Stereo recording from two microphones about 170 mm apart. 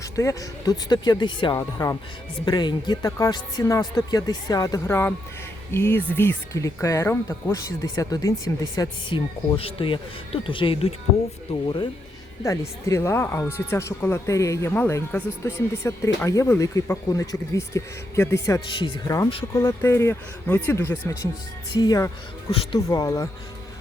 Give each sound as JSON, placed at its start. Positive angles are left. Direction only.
{"t": 0.0, "sound": "speech", "side_deg": 20}
{"t": 12.4, "sound": "speech", "side_deg": 15}
{"t": 18.8, "sound": "speech", "side_deg": 30}
{"t": 19.5, "sound": "speech", "side_deg": 15}